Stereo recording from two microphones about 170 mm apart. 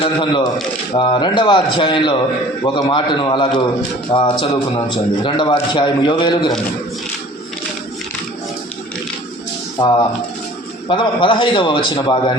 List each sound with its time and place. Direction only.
0.0 s a man's voice: 30° left (ahead or behind)
9.7 s a man's voice: 25° left (ahead or behind)